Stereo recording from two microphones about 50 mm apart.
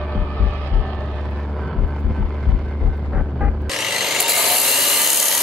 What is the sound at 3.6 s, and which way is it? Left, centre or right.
Wood, centre.